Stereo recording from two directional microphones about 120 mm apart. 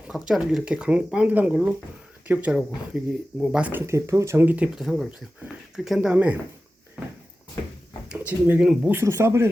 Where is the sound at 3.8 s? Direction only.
25° right (ahead or behind).